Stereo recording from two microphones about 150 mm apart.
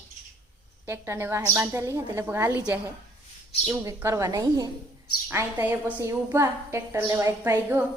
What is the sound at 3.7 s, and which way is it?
A woman's voice, 20° right (ahead or behind).